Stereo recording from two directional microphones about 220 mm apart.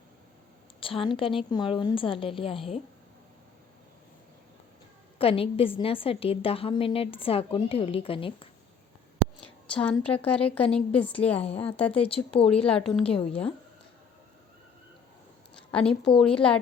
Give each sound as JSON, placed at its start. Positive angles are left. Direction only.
{"t": 0.8, "sound": "a woman's voice", "side_deg": 25}
{"t": 5.1, "sound": "a woman's voice", "side_deg": 25}
{"t": 9.4, "sound": "a sound", "side_deg": 5}
{"t": 10.2, "sound": "a woman's voice", "side_deg": 5}
{"t": 12.0, "sound": "a woman's voice", "side_deg": 25}
{"t": 12.8, "sound": "speech", "side_deg": 0}
{"t": 13.1, "sound": "a woman's voice", "side_deg": 25}
{"t": 15.5, "sound": "a woman's voice", "side_deg": 5}